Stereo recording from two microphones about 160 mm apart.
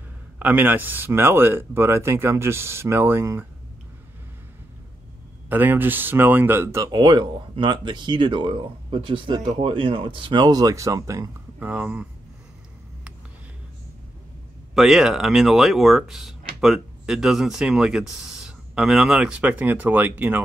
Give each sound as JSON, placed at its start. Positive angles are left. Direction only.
{"t": 0.4, "sound": "speech", "side_deg": -10}
{"t": 5.5, "sound": "speech", "side_deg": -10}
{"t": 14.7, "sound": "speech", "side_deg": 0}